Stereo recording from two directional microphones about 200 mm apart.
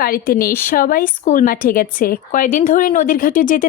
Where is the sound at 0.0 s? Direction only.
45° left (ahead or behind).